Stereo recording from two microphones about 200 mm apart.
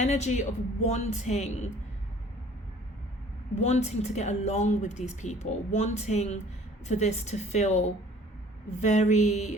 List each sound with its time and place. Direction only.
0.0 s speech: 35° left (ahead or behind)
3.5 s speech: 35° left (ahead or behind)